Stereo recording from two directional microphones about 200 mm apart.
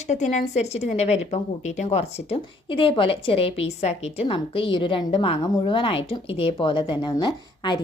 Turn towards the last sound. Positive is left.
turn(degrees=20)  # may be behind; listen again after turning